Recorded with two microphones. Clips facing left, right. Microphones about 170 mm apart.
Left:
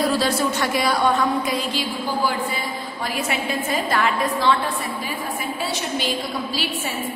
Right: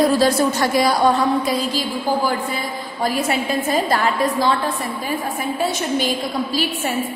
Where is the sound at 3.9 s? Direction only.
35° right (ahead or behind).